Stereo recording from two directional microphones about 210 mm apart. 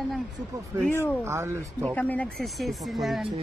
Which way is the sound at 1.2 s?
10° right (ahead or behind).